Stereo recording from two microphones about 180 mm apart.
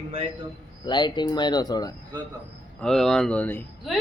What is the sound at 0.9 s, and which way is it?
Speech, 25° left (ahead or behind).